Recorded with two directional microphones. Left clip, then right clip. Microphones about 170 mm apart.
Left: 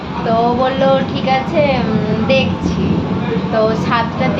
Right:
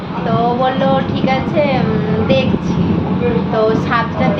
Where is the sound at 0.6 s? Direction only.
15° left (ahead or behind).